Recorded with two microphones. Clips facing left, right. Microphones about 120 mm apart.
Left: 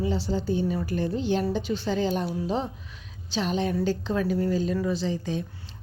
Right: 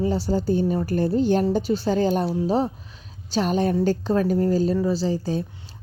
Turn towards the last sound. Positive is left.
turn(degrees=-35)  # may be behind; listen again after turning